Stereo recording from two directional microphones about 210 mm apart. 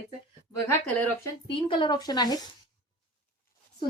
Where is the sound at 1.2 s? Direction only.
25° left (ahead or behind).